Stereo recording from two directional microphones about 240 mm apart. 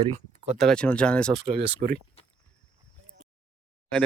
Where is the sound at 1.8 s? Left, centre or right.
Right.